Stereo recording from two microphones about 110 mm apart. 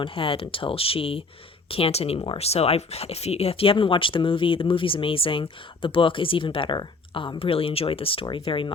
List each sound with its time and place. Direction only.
0.0 s speech: 55° left (ahead or behind)
2.1 s speech: 50° left (ahead or behind)